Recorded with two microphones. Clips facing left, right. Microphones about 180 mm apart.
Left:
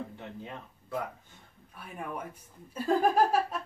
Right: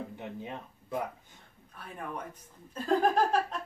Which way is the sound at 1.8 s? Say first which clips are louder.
Left 1 dB; 10° left (ahead or behind).